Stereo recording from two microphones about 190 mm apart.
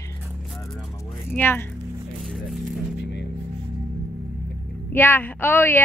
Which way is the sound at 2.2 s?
Centre (ahead or behind).